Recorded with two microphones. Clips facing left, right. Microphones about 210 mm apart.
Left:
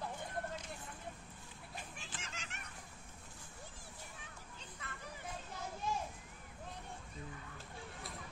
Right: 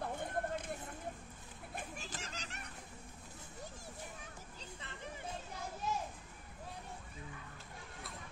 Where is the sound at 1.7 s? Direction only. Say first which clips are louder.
Right 5 dB; 40° right (ahead or behind).